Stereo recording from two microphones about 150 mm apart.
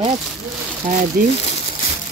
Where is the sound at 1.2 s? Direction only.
75° right (ahead or behind).